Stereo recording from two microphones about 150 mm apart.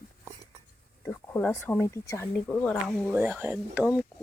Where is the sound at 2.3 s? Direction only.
5° left (ahead or behind).